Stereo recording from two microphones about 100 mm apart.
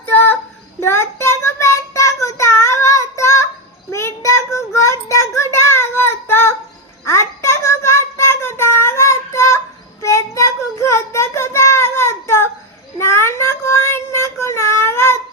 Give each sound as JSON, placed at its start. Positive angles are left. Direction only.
{"t": 0.0, "sound": "child singing", "side_deg": 20}